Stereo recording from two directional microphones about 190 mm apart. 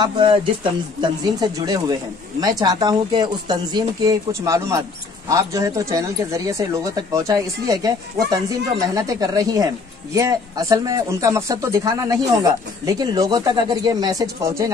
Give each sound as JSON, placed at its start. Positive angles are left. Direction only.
{"t": 0.0, "sound": "speech", "side_deg": -25}